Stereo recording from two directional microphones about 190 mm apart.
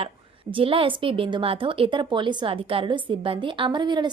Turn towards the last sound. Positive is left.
turn(degrees=-25)  # may be behind; listen again after turning